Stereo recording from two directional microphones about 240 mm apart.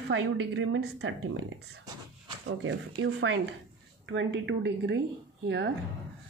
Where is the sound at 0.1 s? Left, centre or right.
Right.